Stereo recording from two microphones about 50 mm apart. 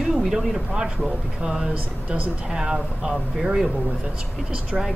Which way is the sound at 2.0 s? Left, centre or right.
Right.